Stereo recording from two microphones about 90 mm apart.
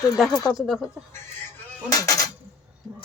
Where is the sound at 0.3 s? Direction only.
40° left (ahead or behind).